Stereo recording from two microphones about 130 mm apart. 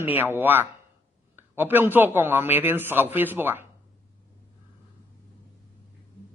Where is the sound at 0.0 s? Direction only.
15° right (ahead or behind).